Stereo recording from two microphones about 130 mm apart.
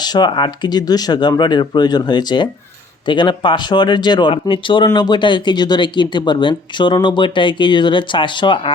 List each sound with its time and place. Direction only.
0.0 s speech: 35° left (ahead or behind)